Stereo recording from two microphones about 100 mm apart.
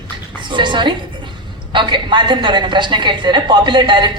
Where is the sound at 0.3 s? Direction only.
55° right (ahead or behind).